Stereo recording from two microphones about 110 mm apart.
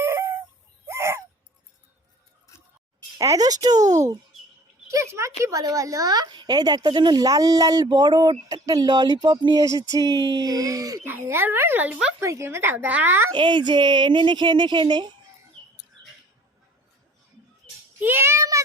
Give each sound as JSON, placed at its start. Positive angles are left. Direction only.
{"t": 0.0, "sound": "fowl", "side_deg": -25}
{"t": 0.9, "sound": "bird", "side_deg": -25}
{"t": 3.2, "sound": "a woman's voice", "side_deg": -30}
{"t": 11.0, "sound": "speech", "side_deg": -20}
{"t": 12.2, "sound": "a woman's voice", "side_deg": -25}
{"t": 13.3, "sound": "speech", "side_deg": -45}
{"t": 18.0, "sound": "child singing", "side_deg": -20}